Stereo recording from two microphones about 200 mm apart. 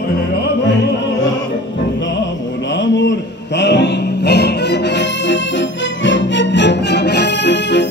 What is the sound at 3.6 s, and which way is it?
Music, 60° left (ahead or behind).